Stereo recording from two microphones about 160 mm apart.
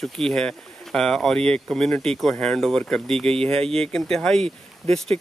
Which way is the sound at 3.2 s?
35° right (ahead or behind).